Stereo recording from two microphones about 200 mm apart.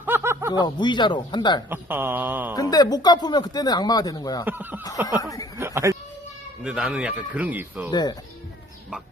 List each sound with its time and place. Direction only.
0.0 s snicker: 10° right (ahead or behind)
0.5 s speech: 20° left (ahead or behind)
1.7 s a sound: 10° right (ahead or behind)
2.6 s speech: 20° left (ahead or behind)
4.4 s a sound: 10° right (ahead or behind)
5.0 s speech: 20° left (ahead or behind)
5.5 s a sound: 15° right (ahead or behind)
6.6 s speech: 5° right (ahead or behind)
7.9 s speech: 20° left (ahead or behind)